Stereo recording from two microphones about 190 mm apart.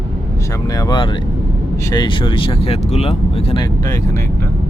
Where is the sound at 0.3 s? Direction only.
15° left (ahead or behind).